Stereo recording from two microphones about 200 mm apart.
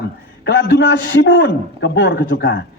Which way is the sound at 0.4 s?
60° left (ahead or behind).